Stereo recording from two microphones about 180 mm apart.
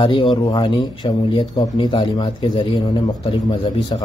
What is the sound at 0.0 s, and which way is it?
Speech, 25° left (ahead or behind).